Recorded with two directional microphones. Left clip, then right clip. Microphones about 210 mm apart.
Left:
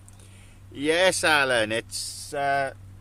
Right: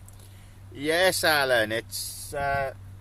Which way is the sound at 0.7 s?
30° left (ahead or behind).